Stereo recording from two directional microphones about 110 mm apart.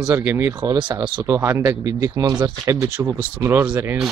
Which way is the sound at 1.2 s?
25° right (ahead or behind).